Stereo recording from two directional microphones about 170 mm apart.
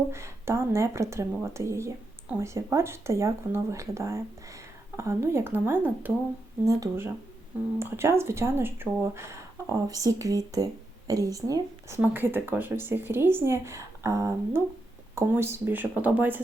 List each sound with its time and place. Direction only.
0.1 s speech: 15° right (ahead or behind)